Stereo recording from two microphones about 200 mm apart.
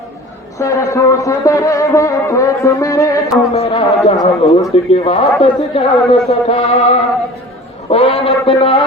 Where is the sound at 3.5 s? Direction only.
30° left (ahead or behind).